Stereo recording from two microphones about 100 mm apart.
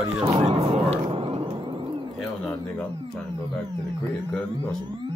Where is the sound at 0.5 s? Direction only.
65° right (ahead or behind).